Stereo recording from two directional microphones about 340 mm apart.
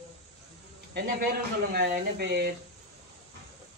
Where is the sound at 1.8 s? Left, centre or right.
Right.